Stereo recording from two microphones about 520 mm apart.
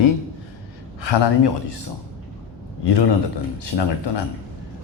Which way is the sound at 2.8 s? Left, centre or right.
Left.